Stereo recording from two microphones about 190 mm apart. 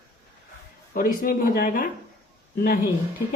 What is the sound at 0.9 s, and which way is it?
Speech, 50° left (ahead or behind).